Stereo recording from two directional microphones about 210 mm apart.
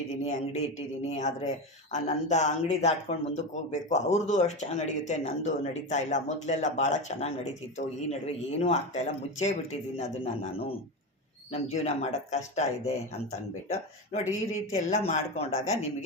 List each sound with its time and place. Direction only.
1.1 s a man's voice: 30° left (ahead or behind)